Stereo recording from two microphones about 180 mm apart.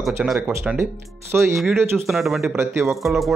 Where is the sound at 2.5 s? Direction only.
15° right (ahead or behind).